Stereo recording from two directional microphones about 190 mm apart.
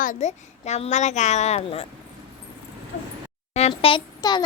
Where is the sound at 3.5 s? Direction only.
35° left (ahead or behind).